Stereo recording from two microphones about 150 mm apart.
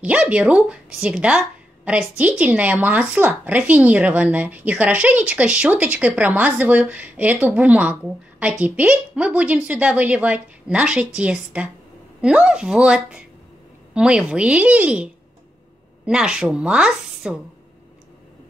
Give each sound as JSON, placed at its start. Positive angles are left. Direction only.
{"t": 0.0, "sound": "speech", "side_deg": -10}
{"t": 16.1, "sound": "a woman's voice", "side_deg": -5}